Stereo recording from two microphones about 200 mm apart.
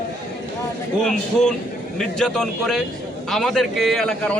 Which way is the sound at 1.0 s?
5° left (ahead or behind).